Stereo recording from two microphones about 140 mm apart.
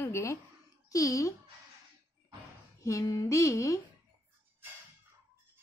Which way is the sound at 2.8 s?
25° left (ahead or behind).